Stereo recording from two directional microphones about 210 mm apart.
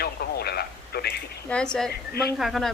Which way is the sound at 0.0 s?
50° left (ahead or behind).